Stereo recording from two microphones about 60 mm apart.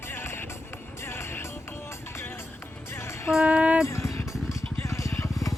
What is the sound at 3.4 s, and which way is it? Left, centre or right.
Music, right.